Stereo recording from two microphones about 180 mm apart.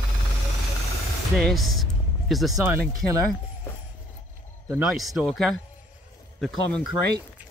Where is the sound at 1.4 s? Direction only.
Centre (ahead or behind).